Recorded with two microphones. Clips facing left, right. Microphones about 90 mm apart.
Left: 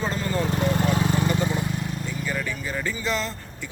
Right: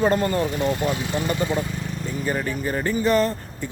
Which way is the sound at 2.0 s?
40° right (ahead or behind).